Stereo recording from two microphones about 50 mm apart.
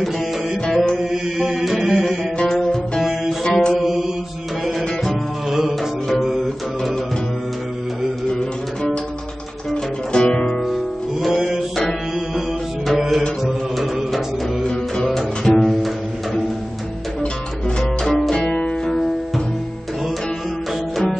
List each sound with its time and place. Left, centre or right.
0.7 s music: centre
1.1 s chant: centre
1.6 s music: centre
2.3 s music: centre
3.0 s music: centre
3.4 s music: centre
3.8 s mantra: centre
4.6 s music: centre
10.1 s music: centre
10.6 s music: centre
17.2 s music: centre
18.0 s music: centre
18.3 s music: left
18.9 s music: centre